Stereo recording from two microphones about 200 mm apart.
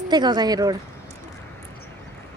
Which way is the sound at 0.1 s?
20° right (ahead or behind).